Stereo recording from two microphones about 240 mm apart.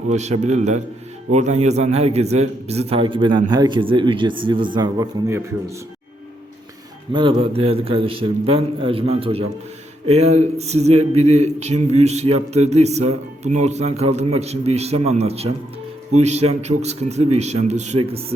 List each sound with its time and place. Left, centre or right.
0.1 s speech: right; by 5.7 s centre
7.1 s speech: right